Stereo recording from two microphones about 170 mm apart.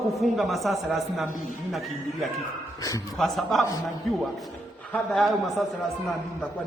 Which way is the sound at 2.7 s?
20° left (ahead or behind).